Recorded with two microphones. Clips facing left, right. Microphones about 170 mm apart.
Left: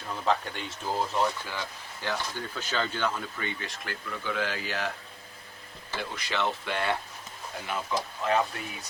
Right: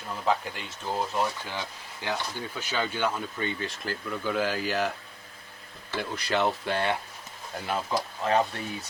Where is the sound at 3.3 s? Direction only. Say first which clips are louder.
Right 4 dB; 30° right (ahead or behind).